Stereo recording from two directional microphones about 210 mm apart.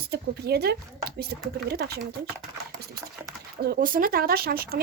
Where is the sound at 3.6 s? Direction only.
45° right (ahead or behind).